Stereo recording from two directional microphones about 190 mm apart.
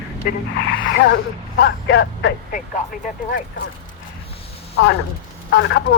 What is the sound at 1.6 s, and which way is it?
Speech, 65° left (ahead or behind).